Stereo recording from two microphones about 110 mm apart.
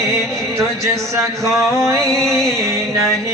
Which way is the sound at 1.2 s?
25° right (ahead or behind).